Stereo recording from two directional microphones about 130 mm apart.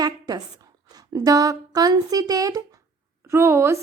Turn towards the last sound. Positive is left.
turn(degrees=-20)  # may be behind; listen again after turning